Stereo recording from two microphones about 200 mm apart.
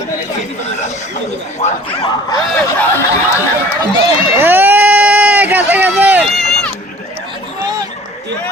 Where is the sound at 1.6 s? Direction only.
25° left (ahead or behind).